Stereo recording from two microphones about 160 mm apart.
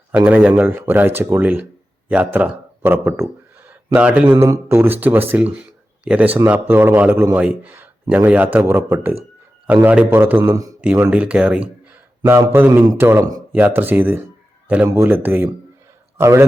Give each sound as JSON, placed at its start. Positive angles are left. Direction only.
{"t": 0.3, "sound": "a man's voice", "side_deg": -10}